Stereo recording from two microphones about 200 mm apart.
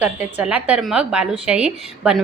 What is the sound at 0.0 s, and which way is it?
A woman's voice, 10° right (ahead or behind).